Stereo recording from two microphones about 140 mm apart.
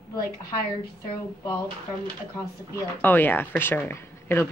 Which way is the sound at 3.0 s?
15° left (ahead or behind).